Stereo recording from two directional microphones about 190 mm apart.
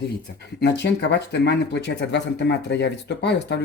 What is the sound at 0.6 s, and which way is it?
Speech, 65° left (ahead or behind).